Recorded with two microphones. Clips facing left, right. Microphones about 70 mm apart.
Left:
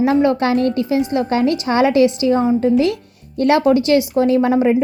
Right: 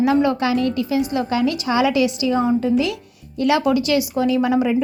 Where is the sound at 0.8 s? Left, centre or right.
Left.